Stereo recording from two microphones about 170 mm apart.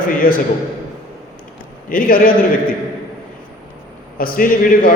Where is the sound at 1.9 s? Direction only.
55° left (ahead or behind).